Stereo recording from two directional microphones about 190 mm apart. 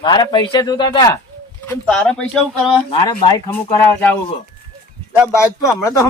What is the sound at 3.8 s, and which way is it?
Speech, 10° left (ahead or behind).